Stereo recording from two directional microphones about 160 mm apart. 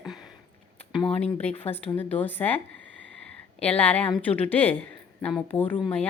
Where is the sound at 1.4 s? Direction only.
40° left (ahead or behind).